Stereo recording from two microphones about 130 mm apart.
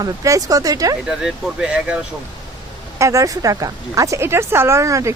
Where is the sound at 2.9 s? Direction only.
25° right (ahead or behind).